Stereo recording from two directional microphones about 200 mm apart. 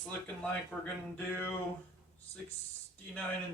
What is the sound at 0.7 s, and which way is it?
Speech, centre (ahead or behind).